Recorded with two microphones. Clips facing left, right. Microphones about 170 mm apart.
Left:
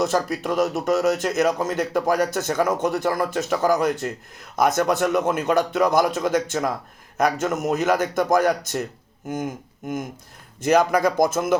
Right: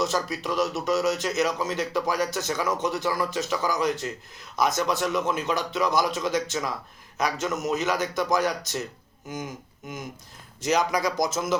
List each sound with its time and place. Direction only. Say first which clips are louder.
0.0 s speech: left 5 dB; 55° left (ahead or behind)